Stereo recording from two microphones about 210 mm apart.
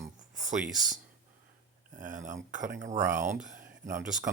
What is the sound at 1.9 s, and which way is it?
Speech, 35° right (ahead or behind).